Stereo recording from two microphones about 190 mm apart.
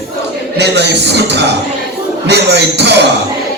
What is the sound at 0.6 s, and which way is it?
Speech, 65° right (ahead or behind).